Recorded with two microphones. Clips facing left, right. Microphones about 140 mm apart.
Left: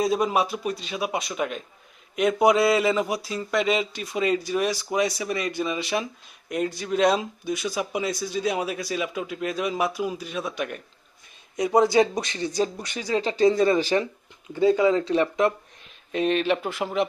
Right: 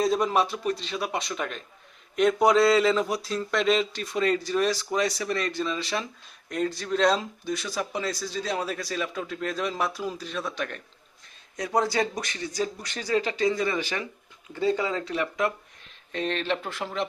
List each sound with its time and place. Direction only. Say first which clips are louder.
0.0 s speech: left 1 dB; 10° left (ahead or behind)
13.3 s speech: left 6 dB; 30° left (ahead or behind)
14.5 s speech: left 7 dB; 15° left (ahead or behind)
16.1 s speech: left 6 dB; 10° left (ahead or behind)